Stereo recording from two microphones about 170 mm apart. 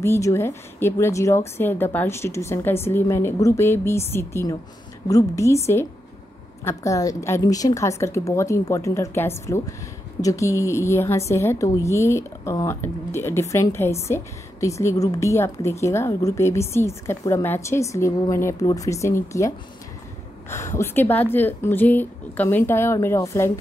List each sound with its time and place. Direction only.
0.0 s a woman's voice: 15° left (ahead or behind)
6.6 s a woman's voice: 20° left (ahead or behind)